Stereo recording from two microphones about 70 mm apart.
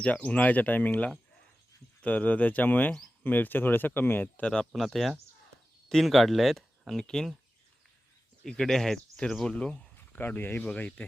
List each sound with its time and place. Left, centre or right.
0.0 s speech: centre
4.4 s speech: centre
4.7 s speech: centre
8.4 s speech: centre
10.1 s speech: left